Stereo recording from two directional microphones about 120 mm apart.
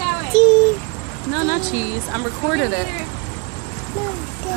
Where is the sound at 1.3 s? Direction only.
15° right (ahead or behind).